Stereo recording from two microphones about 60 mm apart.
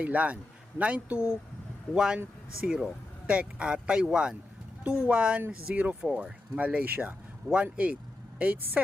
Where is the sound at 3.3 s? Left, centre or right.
Centre.